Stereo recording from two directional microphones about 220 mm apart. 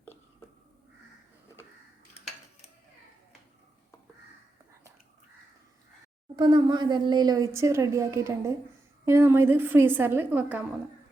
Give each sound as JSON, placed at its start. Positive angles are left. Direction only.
{"t": 6.3, "sound": "speech", "side_deg": -20}